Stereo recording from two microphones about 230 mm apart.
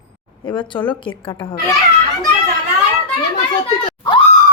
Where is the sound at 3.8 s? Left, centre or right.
Centre.